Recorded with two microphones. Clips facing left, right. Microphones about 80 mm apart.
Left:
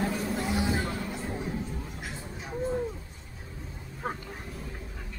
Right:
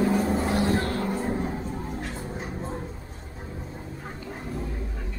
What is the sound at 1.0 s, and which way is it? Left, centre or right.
Music, right.